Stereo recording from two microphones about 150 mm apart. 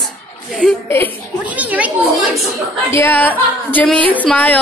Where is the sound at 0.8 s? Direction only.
15° left (ahead or behind).